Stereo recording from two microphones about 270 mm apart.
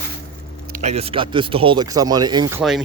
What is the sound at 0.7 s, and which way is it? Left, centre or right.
Speech, right.